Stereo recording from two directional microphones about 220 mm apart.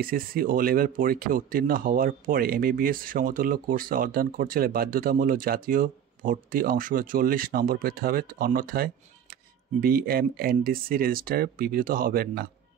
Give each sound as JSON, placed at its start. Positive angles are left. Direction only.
{"t": 0.0, "sound": "speech", "side_deg": -40}